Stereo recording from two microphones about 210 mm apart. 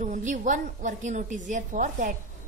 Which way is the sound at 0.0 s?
35° right (ahead or behind).